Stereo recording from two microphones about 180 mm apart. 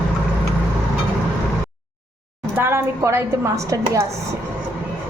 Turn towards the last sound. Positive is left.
turn(degrees=-15)  # may be behind; listen again after turning